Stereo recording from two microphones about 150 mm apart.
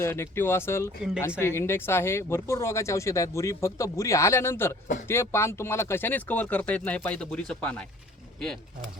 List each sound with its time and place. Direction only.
0.0 s speech: 15° left (ahead or behind)